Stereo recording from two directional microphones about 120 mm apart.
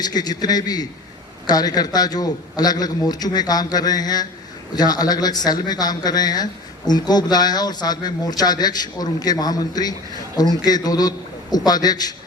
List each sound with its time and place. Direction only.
0.0 s speech: 35° left (ahead or behind)